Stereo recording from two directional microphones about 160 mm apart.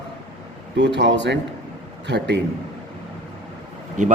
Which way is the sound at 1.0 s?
90° right.